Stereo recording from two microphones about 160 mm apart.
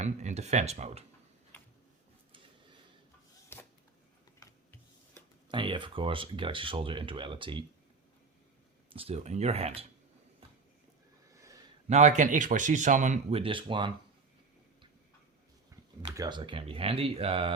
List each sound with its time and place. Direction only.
0.0 s speech: 45° right (ahead or behind)
3.5 s a sound: 15° left (ahead or behind)
5.5 s speech: 30° right (ahead or behind)
8.9 s speech: 35° right (ahead or behind)
11.3 s a sound: 20° right (ahead or behind)
11.9 s speech: 45° right (ahead or behind)
13.4 s speech: 30° right (ahead or behind)
16.1 s speech: 25° right (ahead or behind)